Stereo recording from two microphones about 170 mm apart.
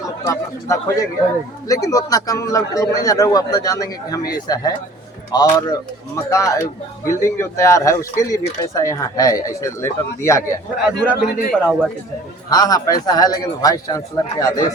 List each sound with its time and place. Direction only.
0.3 s a man's voice: 20° left (ahead or behind)
11.3 s a man's voice: 60° left (ahead or behind)
11.6 s a man's voice: 5° right (ahead or behind)
12.5 s a man's voice: 20° left (ahead or behind)